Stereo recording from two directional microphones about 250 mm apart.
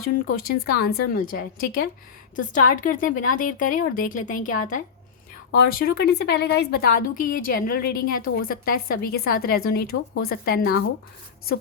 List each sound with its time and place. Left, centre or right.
0.3 s a woman's voice: left
7.9 s a woman's voice: left
8.2 s a woman's voice: left